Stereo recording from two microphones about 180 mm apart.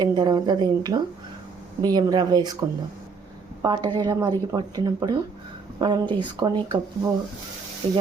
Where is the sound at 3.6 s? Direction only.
20° right (ahead or behind).